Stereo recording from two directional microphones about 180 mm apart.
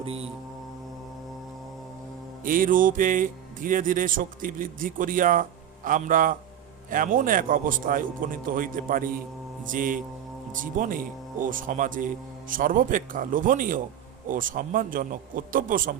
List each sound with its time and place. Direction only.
0.0 s mantra: 35° right (ahead or behind)
2.4 s speech: 50° right (ahead or behind)